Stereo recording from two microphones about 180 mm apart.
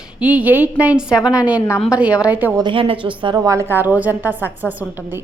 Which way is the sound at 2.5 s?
25° right (ahead or behind).